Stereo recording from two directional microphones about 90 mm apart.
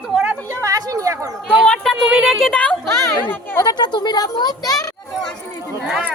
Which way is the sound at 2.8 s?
30° left (ahead or behind).